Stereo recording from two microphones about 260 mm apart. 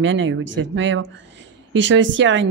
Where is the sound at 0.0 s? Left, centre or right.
Right.